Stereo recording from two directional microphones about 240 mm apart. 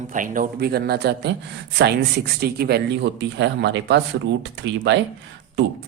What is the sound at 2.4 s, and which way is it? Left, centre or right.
Speech, right.